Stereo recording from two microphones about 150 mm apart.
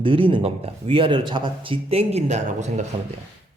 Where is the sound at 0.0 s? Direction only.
35° right (ahead or behind).